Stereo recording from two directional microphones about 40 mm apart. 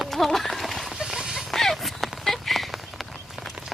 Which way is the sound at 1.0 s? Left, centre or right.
Centre.